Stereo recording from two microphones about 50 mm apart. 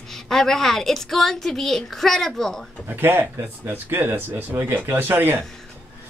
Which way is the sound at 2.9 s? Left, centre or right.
Right.